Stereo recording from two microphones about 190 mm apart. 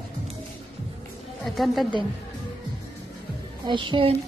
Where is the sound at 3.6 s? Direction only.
25° right (ahead or behind).